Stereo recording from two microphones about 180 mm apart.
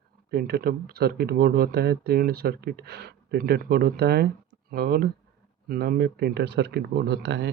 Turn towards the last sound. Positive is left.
turn(degrees=-75)  # may be behind; listen again after turning